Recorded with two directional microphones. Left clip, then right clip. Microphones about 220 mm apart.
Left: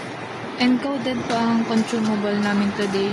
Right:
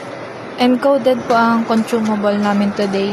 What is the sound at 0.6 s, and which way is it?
A woman's voice, 20° right (ahead or behind).